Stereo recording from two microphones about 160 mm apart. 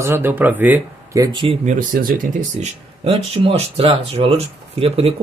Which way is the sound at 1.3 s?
30° right (ahead or behind).